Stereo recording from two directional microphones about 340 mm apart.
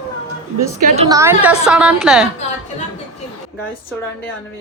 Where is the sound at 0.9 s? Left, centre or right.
Centre.